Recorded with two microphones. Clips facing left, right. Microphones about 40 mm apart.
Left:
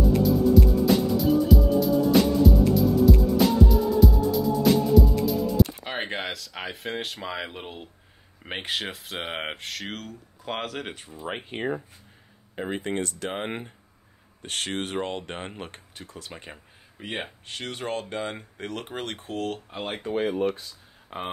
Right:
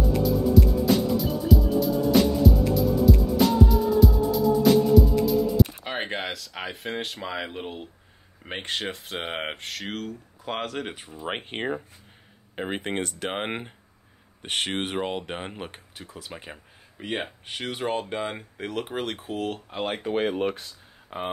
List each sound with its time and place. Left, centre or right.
0.2 s music: centre
8.5 s speech: centre
11.2 s speech: right
15.0 s speech: centre
17.5 s speech: centre
20.2 s speech: right
21.1 s speech: centre